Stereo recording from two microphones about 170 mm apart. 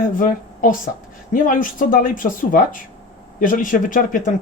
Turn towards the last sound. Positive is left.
turn(degrees=50)  # may be behind; listen again after turning